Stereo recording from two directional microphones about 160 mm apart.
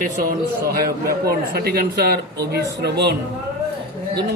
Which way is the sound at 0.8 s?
75° right (ahead or behind).